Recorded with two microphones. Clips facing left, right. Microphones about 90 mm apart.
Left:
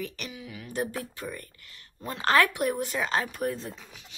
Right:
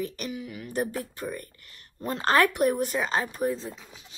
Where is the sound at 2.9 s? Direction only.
25° right (ahead or behind).